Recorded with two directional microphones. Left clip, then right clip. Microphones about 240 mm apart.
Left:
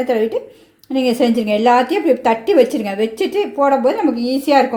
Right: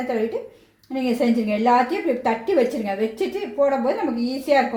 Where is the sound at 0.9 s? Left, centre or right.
Left.